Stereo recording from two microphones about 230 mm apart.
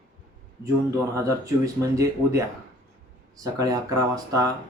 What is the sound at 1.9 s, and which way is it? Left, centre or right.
Speech, centre.